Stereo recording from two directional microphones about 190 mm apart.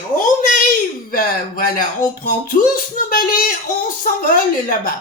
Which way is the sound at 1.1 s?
50° left (ahead or behind).